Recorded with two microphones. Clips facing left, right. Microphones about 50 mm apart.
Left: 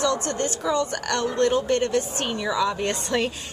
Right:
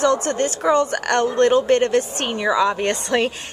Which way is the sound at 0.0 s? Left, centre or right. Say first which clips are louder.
Right 6 dB; right.